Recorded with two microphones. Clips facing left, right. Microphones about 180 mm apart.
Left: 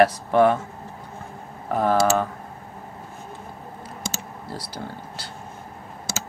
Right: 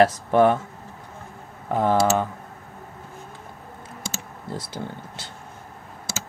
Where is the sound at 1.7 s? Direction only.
20° right (ahead or behind).